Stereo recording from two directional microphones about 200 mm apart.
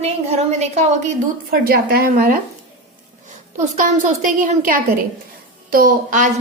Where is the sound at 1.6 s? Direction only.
50° right (ahead or behind).